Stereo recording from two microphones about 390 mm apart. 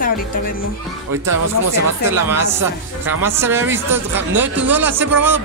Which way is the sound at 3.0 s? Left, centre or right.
Centre.